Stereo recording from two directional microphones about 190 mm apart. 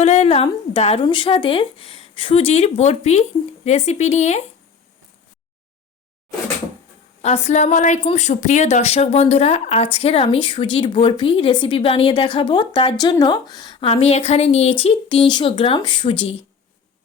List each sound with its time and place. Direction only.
0.0 s speech: 35° left (ahead or behind)
7.2 s a woman's voice: 35° left (ahead or behind)